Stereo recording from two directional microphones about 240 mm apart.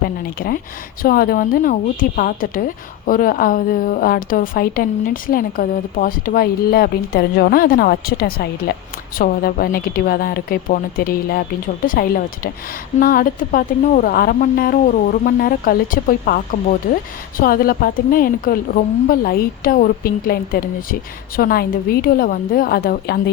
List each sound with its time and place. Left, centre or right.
0.3 s a woman's voice: left